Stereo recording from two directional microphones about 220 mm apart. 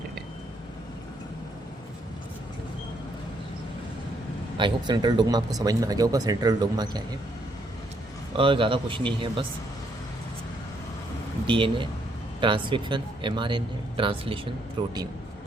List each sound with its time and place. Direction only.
4.5 s speech: 20° right (ahead or behind)
8.4 s speech: 25° right (ahead or behind)
11.4 s speech: 20° right (ahead or behind)